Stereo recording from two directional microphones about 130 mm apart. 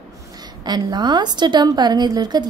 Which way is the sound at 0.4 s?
30° right (ahead or behind).